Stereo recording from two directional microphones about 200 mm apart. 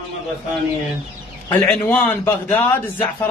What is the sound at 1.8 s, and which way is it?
A man's voice, 10° left (ahead or behind).